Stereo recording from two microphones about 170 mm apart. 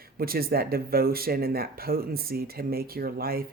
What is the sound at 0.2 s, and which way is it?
Speech, 60° right (ahead or behind).